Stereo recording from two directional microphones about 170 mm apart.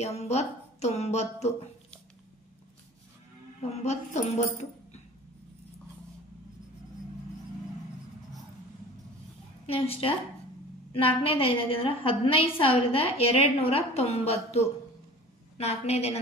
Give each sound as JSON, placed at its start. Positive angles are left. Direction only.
{"t": 0.0, "sound": "a woman's voice", "side_deg": 40}
{"t": 3.6, "sound": "a woman's voice", "side_deg": 40}
{"t": 9.7, "sound": "a woman's voice", "side_deg": 35}